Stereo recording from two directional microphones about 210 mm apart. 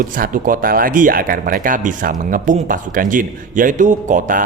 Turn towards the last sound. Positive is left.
turn(degrees=-40)  # may be behind; listen again after turning